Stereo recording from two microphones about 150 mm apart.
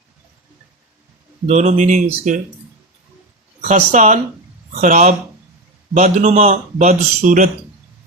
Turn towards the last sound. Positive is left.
turn(degrees=-55)  # may be behind; listen again after turning